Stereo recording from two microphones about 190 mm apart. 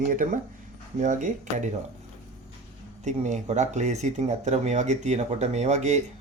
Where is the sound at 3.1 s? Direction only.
40° right (ahead or behind).